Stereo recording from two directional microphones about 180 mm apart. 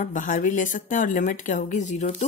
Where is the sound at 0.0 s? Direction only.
45° left (ahead or behind).